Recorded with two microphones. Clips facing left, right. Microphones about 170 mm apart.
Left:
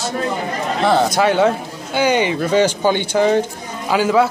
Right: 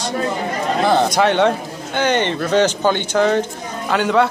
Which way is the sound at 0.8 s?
Centre (ahead or behind).